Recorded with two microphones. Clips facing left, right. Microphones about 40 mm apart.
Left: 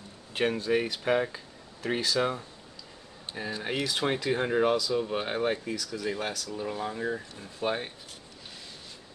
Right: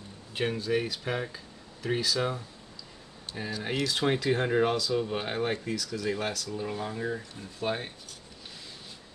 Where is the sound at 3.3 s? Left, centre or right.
Left.